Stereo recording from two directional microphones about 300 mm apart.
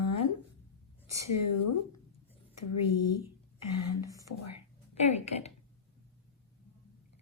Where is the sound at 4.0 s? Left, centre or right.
Centre.